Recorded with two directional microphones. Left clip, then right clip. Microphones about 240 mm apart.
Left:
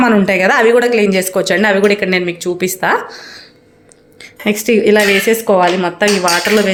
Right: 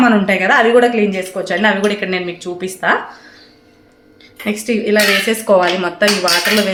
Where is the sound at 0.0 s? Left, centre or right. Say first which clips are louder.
Left 2 dB; left.